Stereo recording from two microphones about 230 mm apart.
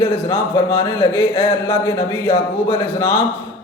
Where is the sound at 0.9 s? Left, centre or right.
Centre.